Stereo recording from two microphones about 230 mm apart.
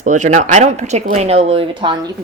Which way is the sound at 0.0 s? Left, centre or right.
Right.